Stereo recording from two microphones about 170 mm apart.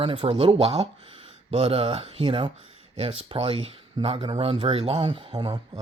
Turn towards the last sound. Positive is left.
turn(degrees=-25)  # may be behind; listen again after turning